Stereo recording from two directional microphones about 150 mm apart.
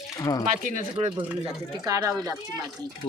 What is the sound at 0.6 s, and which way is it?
Speech, 60° right (ahead or behind).